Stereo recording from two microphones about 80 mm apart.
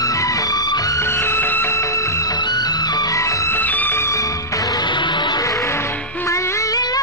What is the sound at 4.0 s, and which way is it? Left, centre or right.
Music, left.